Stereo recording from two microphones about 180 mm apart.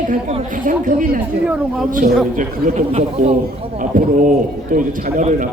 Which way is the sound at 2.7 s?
35° right (ahead or behind).